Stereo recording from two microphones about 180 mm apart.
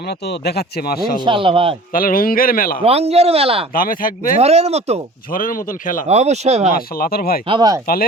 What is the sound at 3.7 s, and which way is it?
Speech, 50° left (ahead or behind).